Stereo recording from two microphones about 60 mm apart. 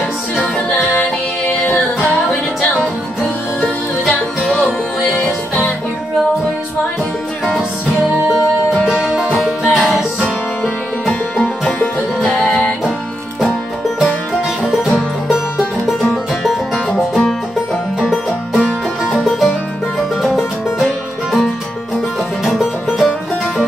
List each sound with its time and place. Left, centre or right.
1.5 s music: left
2.2 s music: centre
7.4 s music: centre
8.3 s music: centre
22.4 s music: centre